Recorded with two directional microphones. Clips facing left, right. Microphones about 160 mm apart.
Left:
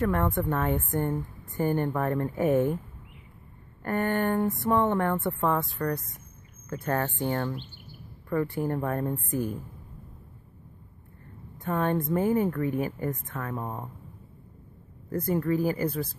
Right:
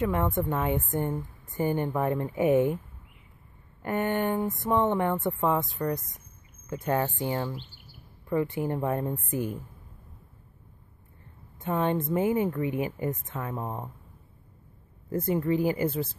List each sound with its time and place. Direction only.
0.0 s speech: 15° right (ahead or behind)
3.8 s speech: 15° right (ahead or behind)
11.5 s a woman's voice: 20° right (ahead or behind)
15.0 s speech: 20° right (ahead or behind)